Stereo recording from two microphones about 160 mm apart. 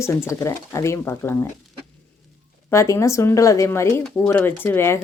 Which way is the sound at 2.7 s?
15° left (ahead or behind).